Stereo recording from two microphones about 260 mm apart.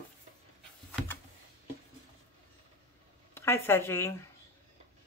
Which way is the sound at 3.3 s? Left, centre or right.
Centre.